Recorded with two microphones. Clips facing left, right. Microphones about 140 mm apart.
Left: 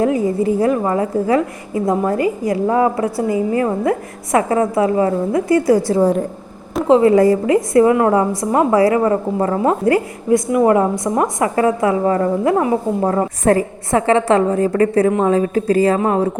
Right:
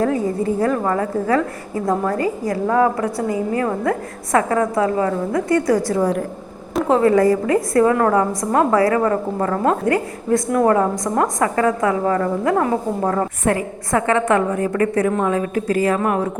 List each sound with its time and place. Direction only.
0.0 s a woman's voice: 20° left (ahead or behind)
10.2 s a woman's voice: 10° left (ahead or behind); by 13.7 s 35° left (ahead or behind)
13.9 s a woman's voice: 25° left (ahead or behind)